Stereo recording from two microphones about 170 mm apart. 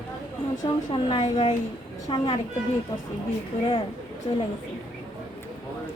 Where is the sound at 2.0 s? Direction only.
30° left (ahead or behind).